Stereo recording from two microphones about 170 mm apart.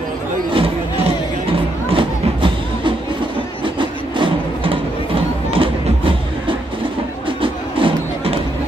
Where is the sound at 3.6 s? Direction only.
30° right (ahead or behind).